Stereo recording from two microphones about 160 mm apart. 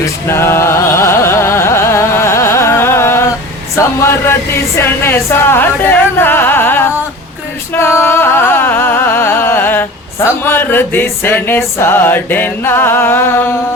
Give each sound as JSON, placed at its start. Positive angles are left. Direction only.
{"t": 0.3, "sound": "music", "side_deg": 15}
{"t": 3.8, "sound": "a sound", "side_deg": 15}
{"t": 7.7, "sound": "music", "side_deg": 15}